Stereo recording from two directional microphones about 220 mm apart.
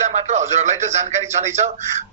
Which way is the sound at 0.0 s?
30° right (ahead or behind).